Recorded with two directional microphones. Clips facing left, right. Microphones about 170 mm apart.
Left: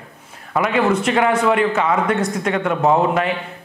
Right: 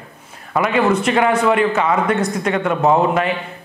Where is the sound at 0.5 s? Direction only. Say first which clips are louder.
Right 1 dB; 15° right (ahead or behind).